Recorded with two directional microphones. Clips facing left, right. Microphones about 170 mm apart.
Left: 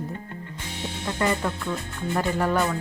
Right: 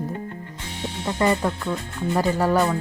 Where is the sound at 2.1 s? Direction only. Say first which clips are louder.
Right 3 dB; 35° right (ahead or behind).